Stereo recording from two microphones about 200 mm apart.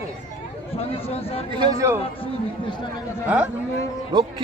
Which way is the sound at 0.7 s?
30° left (ahead or behind).